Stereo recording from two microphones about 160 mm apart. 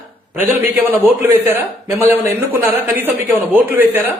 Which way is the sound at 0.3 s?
15° right (ahead or behind).